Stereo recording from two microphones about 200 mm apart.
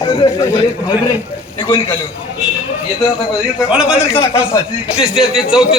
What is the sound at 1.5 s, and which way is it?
Speech, 25° left (ahead or behind).